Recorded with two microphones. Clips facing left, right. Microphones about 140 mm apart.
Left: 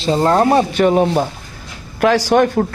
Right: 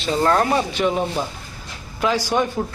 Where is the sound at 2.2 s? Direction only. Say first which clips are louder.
Left 8 dB; 65° left (ahead or behind).